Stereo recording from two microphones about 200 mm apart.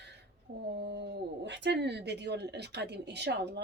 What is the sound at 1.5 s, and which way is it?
Speech, 60° right (ahead or behind).